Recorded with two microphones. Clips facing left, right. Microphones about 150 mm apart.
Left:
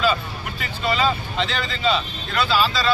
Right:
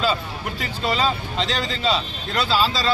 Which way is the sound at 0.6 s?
35° right (ahead or behind).